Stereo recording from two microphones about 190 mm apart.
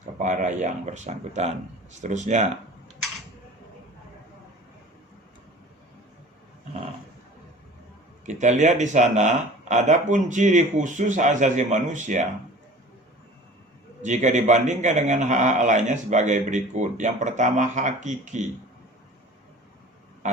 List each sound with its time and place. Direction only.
0.0 s a man's voice: 40° right (ahead or behind)
8.3 s a man's voice: 40° right (ahead or behind)
14.0 s a man's voice: 40° right (ahead or behind)